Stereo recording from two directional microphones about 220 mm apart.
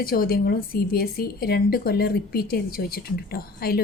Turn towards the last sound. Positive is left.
turn(degrees=45)  # may be behind; listen again after turning